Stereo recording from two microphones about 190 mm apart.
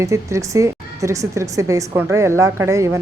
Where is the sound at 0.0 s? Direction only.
15° right (ahead or behind).